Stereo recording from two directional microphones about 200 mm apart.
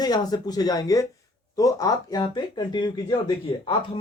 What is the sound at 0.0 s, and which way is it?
Speech, 20° left (ahead or behind).